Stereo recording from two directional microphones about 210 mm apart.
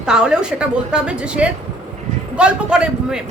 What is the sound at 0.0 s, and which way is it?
A woman's voice, 5° right (ahead or behind).